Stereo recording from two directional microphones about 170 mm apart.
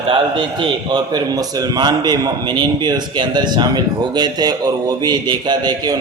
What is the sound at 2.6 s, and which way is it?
A man's voice, 25° right (ahead or behind).